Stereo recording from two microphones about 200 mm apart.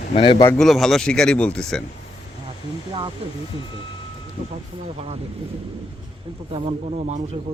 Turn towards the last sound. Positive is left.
turn(degrees=-35)  # may be behind; listen again after turning